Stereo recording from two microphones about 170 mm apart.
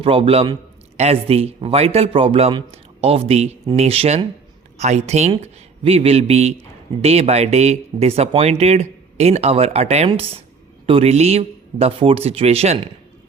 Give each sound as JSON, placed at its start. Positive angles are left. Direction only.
{"t": 0.0, "sound": "speech", "side_deg": -35}